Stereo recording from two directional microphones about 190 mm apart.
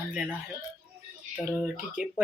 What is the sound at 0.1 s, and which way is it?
Speech, 5° right (ahead or behind).